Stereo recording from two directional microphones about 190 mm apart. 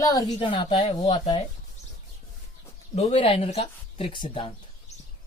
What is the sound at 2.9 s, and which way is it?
Speech, 30° left (ahead or behind).